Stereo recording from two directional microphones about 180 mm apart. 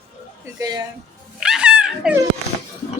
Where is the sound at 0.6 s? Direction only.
20° right (ahead or behind).